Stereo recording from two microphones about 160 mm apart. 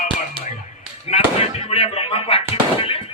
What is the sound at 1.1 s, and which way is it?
Fireworks, 35° left (ahead or behind).